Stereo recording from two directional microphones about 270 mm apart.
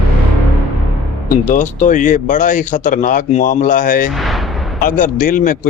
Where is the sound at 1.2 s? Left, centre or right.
Left.